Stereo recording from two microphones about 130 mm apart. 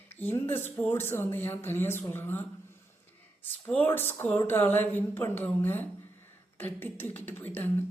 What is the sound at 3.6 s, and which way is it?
Speech, 15° left (ahead or behind).